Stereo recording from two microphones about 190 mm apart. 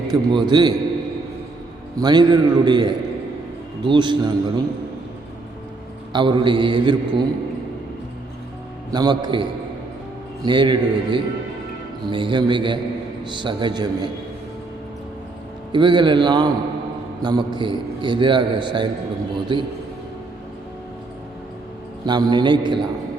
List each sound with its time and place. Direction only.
0.1 s a man's voice: 20° right (ahead or behind)
2.0 s a man's voice: 20° right (ahead or behind)
6.1 s a man's voice: 25° right (ahead or behind)
8.9 s a man's voice: 20° right (ahead or behind)
15.7 s a man's voice: 25° right (ahead or behind)
22.0 s a man's voice: 25° right (ahead or behind)